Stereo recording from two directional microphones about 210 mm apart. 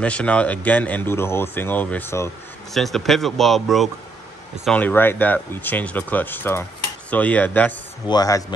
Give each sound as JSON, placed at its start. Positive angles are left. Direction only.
{"t": 0.0, "sound": "speech", "side_deg": 5}
{"t": 2.7, "sound": "speech", "side_deg": 0}